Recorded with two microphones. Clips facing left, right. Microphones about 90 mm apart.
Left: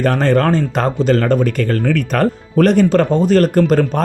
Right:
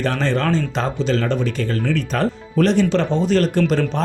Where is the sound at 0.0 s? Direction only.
50° left (ahead or behind).